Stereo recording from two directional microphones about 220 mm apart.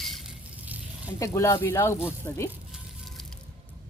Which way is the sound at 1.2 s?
15° left (ahead or behind).